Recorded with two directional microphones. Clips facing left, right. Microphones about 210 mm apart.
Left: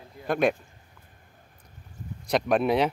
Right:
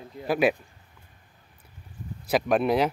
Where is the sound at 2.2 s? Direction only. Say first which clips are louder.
Even; centre (ahead or behind).